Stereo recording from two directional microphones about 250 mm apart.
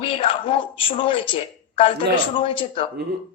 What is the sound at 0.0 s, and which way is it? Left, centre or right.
Speech, left.